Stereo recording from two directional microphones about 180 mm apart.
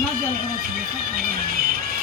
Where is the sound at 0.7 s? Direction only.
55° right (ahead or behind).